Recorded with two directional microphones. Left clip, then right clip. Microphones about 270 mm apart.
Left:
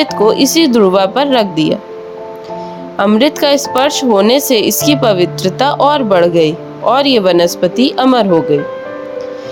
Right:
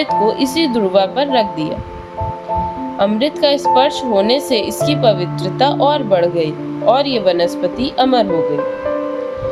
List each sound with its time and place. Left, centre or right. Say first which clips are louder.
0.0 s a woman's voice: left 4 dB; left
3.0 s a woman's voice: left 4 dB; left